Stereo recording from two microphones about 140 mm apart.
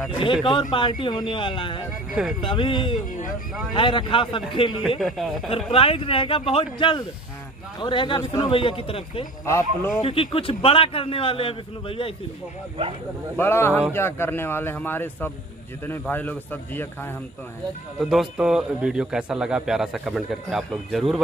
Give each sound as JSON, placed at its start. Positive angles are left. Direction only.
{"t": 0.2, "sound": "a man's voice", "side_deg": 40}
{"t": 4.8, "sound": "speech", "side_deg": 0}
{"t": 5.7, "sound": "a man's voice", "side_deg": 40}
{"t": 8.2, "sound": "speech", "side_deg": 25}
{"t": 8.5, "sound": "a man's voice", "side_deg": 40}
{"t": 9.5, "sound": "speech", "side_deg": 20}
{"t": 10.0, "sound": "a man's voice", "side_deg": 40}
{"t": 13.4, "sound": "a man's voice", "side_deg": 15}
{"t": 18.0, "sound": "speech", "side_deg": -5}